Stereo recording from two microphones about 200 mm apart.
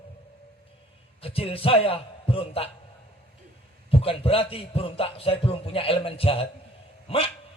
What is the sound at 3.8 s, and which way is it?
A man's voice, 30° left (ahead or behind).